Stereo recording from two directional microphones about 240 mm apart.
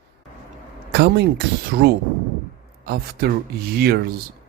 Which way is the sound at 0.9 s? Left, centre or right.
Right.